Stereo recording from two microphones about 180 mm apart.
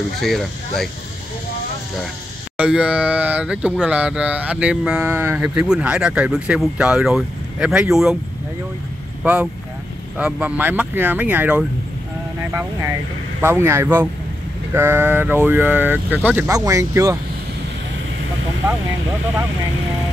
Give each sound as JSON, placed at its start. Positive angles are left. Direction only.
{"t": 0.2, "sound": "speech", "side_deg": 0}
{"t": 2.5, "sound": "speech", "side_deg": -5}
{"t": 9.2, "sound": "speech", "side_deg": -10}
{"t": 13.4, "sound": "speech", "side_deg": -15}